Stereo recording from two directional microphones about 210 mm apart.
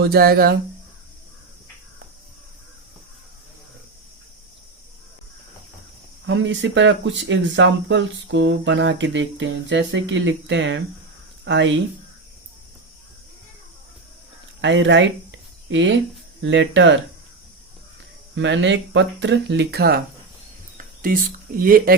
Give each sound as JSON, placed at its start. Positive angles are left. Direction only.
{"t": 0.0, "sound": "speech", "side_deg": -45}
{"t": 6.2, "sound": "speech", "side_deg": -60}
{"t": 14.6, "sound": "speech", "side_deg": -60}
{"t": 18.3, "sound": "speech", "side_deg": -60}
{"t": 20.7, "sound": "a sound", "side_deg": -40}
{"t": 21.6, "sound": "speech", "side_deg": -45}